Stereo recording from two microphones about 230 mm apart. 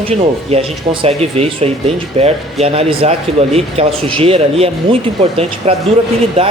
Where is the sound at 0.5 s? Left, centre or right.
Right.